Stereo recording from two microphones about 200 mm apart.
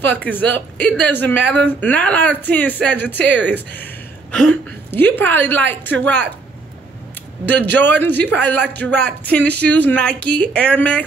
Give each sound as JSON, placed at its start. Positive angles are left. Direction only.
{"t": 0.0, "sound": "speech", "side_deg": 10}
{"t": 7.7, "sound": "speech", "side_deg": 10}